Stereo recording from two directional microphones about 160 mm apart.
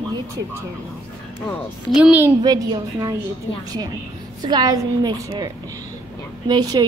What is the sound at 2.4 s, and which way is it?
Speech, 25° right (ahead or behind).